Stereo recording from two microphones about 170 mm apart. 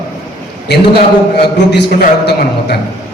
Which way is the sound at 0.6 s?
75° left (ahead or behind).